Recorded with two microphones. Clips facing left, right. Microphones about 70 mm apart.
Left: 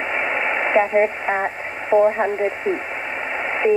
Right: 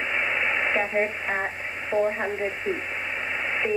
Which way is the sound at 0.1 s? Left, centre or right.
Left.